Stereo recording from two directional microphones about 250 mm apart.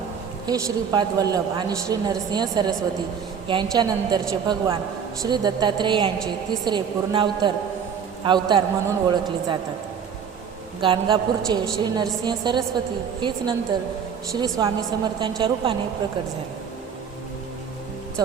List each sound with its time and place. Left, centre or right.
0.4 s a woman's voice: centre
10.8 s a woman's voice: centre